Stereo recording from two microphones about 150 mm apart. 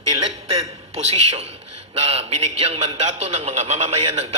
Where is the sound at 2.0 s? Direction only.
45° right (ahead or behind).